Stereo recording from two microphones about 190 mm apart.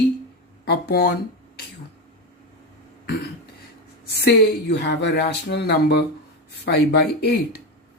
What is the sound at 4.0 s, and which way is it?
Speech, 55° left (ahead or behind).